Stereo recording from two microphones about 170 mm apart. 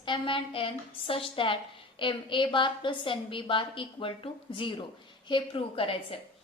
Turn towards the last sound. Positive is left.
turn(degrees=35)  # may be behind; listen again after turning